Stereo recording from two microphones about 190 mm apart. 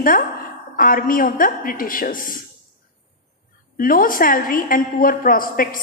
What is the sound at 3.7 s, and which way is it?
A woman's voice, 50° left (ahead or behind).